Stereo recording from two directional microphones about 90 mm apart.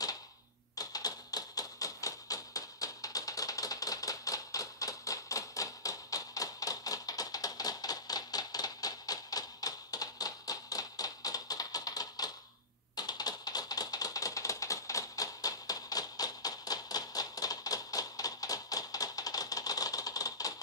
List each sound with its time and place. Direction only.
0.7 s tap: 45° left (ahead or behind)
12.9 s typewriter: 50° left (ahead or behind)